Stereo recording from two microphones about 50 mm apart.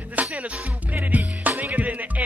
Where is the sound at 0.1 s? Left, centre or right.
Right.